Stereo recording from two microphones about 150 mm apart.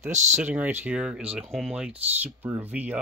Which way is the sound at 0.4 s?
10° right (ahead or behind).